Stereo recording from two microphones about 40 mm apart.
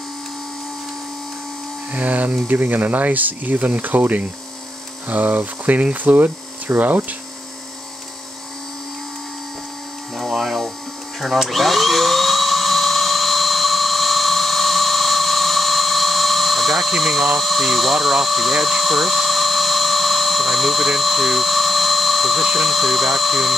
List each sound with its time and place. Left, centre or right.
1.9 s speech: right
10.1 s mains hum: centre
11.3 s a sound: centre
17.4 s ratchet: centre